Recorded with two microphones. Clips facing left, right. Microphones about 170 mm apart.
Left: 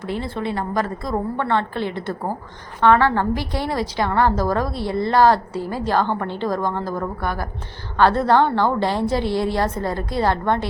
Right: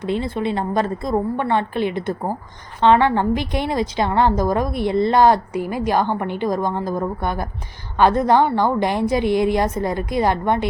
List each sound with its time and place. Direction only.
0.0 s a woman's voice: 20° right (ahead or behind)